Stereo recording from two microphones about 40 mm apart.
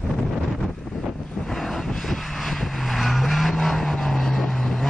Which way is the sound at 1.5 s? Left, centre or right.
Centre.